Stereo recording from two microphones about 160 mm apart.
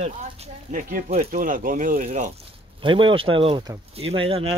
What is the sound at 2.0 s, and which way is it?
Speech, 45° right (ahead or behind).